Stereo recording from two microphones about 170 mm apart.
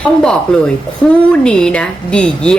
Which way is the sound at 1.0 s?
10° left (ahead or behind).